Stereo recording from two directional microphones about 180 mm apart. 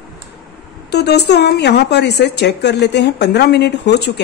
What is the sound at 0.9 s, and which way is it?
A woman's voice, 65° left (ahead or behind).